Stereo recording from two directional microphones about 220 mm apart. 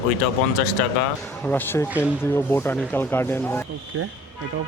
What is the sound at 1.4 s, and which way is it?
Speech, 10° left (ahead or behind).